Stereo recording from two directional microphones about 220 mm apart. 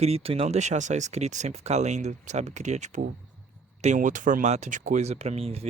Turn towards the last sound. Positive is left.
turn(degrees=-25)  # may be behind; listen again after turning